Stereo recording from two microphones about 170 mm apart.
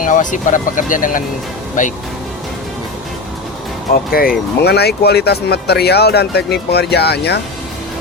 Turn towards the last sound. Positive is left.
turn(degrees=75)  # may be behind; listen again after turning